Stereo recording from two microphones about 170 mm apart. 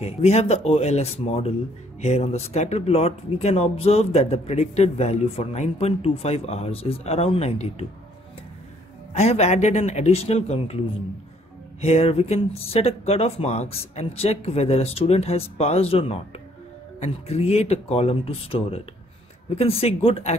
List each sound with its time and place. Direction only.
0.0 s speech: 40° left (ahead or behind)
9.1 s speech: 40° left (ahead or behind)
11.8 s speech: 35° left (ahead or behind)